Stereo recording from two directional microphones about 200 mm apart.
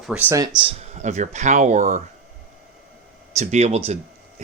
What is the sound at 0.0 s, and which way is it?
Speech, 5° right (ahead or behind).